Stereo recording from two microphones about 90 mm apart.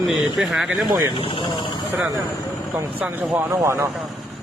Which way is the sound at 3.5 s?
35° right (ahead or behind).